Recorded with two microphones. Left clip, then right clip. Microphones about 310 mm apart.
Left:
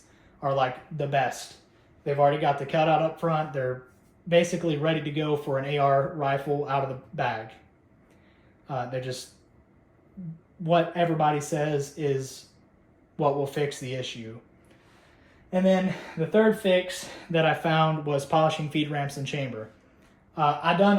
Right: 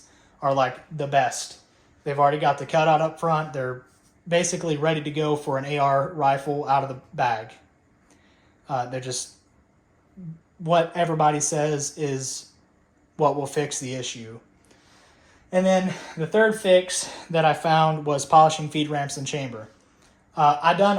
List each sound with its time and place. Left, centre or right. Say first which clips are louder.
0.3 s speech: right 4 dB; right
8.6 s speech: right 4 dB; centre
10.6 s speech: right 2 dB; centre
15.4 s speech: right 3 dB; right
17.3 s speech: right 4 dB; centre